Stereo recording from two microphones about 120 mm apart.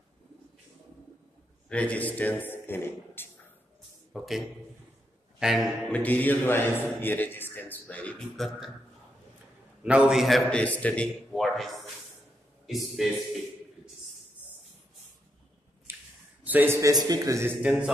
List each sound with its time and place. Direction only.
1.7 s a man's voice: 10° left (ahead or behind)
4.1 s a man's voice: centre (ahead or behind)
5.9 s a man's voice: 15° left (ahead or behind)
8.5 s speech: centre (ahead or behind)
9.8 s speech: 5° right (ahead or behind)
10.6 s speech: 10° left (ahead or behind)
15.9 s a sound: 20° right (ahead or behind)
16.4 s a man's voice: 20° right (ahead or behind)